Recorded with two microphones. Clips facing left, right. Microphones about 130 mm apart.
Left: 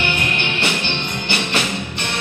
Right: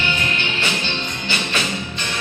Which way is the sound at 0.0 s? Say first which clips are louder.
Left 2 dB; 60° left (ahead or behind).